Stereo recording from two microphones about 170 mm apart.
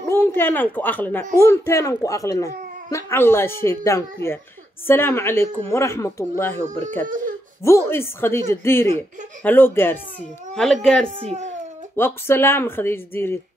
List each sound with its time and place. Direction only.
0.1 s speech: 10° left (ahead or behind)
7.1 s speech: 55° right (ahead or behind)
7.6 s speech: 15° left (ahead or behind)
11.1 s speech: 35° right (ahead or behind)
11.9 s speech: 15° left (ahead or behind)